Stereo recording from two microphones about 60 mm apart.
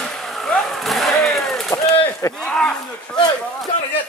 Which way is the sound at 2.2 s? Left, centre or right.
Left.